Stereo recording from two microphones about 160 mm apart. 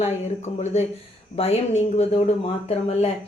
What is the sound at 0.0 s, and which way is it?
Speech, 45° left (ahead or behind).